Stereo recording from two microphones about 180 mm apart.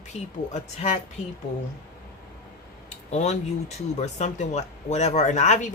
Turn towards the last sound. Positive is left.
turn(degrees=40)  # may be behind; listen again after turning